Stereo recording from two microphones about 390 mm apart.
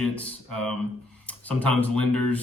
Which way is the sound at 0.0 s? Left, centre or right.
Centre.